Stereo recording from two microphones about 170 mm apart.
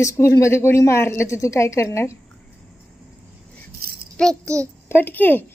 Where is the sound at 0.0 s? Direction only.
15° left (ahead or behind).